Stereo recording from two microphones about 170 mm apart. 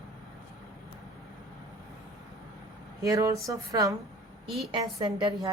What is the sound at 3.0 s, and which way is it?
Speech, 20° right (ahead or behind).